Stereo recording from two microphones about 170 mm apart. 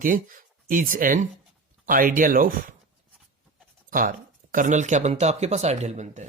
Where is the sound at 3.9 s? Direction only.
55° right (ahead or behind).